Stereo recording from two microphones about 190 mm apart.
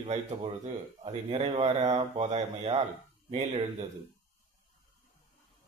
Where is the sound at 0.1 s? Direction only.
35° right (ahead or behind).